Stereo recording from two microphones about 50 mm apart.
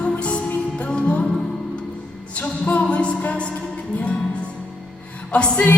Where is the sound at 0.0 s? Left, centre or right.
Left.